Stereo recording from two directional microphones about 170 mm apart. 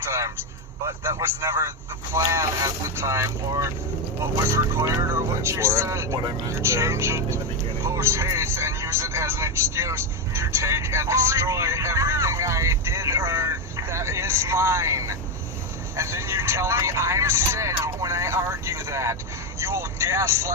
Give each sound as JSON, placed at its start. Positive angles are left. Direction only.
{"t": 0.9, "sound": "speech", "side_deg": -15}